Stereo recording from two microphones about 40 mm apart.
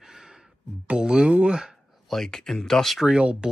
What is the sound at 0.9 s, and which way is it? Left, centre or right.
Speech, right.